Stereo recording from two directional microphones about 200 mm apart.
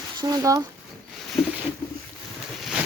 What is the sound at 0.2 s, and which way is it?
Speech, 15° right (ahead or behind).